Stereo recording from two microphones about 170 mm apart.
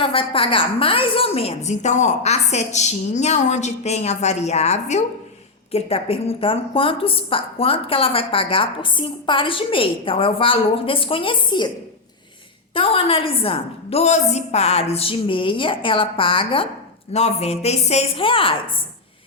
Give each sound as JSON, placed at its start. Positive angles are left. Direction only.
{"t": 0.0, "sound": "a woman's voice", "side_deg": 30}
{"t": 12.7, "sound": "a woman's voice", "side_deg": 35}